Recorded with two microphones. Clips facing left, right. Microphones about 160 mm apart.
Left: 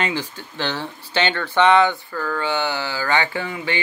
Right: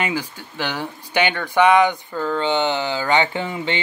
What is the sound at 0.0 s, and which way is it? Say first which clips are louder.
Speech: even; 10° right (ahead or behind).